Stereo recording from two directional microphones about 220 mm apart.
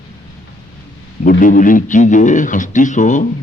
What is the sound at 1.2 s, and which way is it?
A man's voice, 40° left (ahead or behind).